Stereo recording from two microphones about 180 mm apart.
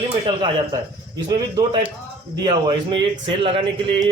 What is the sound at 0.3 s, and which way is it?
A man's voice, 25° right (ahead or behind).